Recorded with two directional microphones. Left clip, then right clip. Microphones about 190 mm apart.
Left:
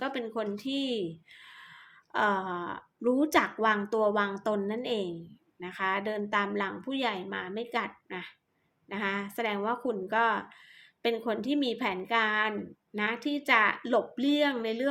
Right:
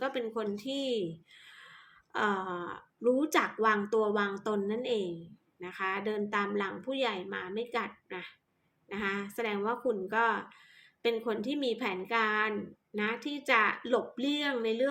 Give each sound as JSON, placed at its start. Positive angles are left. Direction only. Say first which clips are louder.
{"t": 0.0, "sound": "speech", "louder": "left 1 dB", "side_deg": 15}